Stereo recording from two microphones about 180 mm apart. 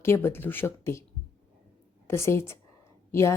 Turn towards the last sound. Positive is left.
turn(degrees=15)  # may be behind; listen again after turning